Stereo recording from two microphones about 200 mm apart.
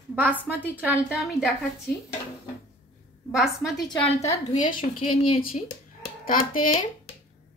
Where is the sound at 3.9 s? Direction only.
30° left (ahead or behind).